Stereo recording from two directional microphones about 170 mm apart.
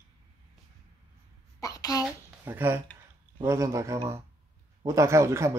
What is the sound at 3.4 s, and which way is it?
Speech, 20° right (ahead or behind).